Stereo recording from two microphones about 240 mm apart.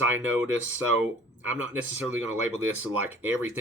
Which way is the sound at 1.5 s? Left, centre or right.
Centre.